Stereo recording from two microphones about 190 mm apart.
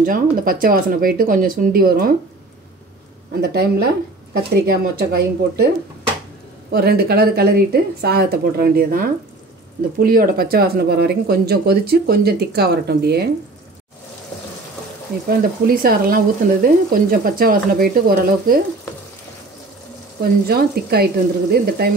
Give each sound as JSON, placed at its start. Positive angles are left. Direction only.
{"t": 0.0, "sound": "speech", "side_deg": -50}
{"t": 3.3, "sound": "speech", "side_deg": -60}
{"t": 6.7, "sound": "speech", "side_deg": -55}
{"t": 15.2, "sound": "speech", "side_deg": -50}
{"t": 20.2, "sound": "speech", "side_deg": -55}